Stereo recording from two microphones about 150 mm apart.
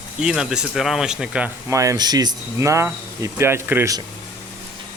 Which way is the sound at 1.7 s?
20° right (ahead or behind).